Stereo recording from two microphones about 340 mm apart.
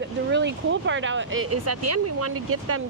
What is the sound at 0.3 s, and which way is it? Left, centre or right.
Speech, right.